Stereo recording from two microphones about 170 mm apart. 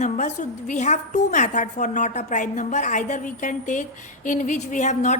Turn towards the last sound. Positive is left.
turn(degrees=45)  # may be behind; listen again after turning